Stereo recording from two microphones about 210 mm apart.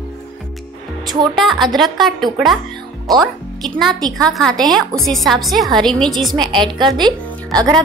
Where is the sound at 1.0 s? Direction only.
20° right (ahead or behind).